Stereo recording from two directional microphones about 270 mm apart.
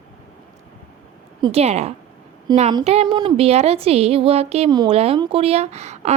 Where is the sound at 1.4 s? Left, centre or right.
Centre.